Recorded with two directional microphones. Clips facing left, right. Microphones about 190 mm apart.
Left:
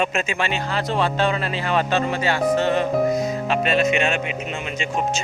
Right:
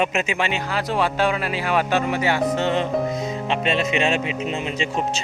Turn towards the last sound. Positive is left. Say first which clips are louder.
# right 2 dB
turn(degrees=-35)  # may be behind; listen again after turning